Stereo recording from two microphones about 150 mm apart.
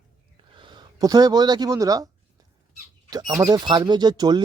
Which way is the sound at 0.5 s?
30° right (ahead or behind).